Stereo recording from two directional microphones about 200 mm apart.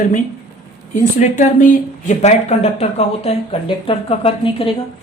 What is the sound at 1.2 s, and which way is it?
Speech, 35° left (ahead or behind).